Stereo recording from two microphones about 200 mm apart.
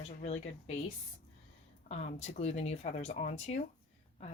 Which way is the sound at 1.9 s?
35° left (ahead or behind).